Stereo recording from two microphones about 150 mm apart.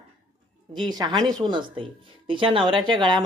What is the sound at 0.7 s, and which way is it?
Speech, 30° right (ahead or behind).